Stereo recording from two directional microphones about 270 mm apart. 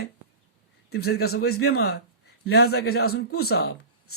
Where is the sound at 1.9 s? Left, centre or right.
Left.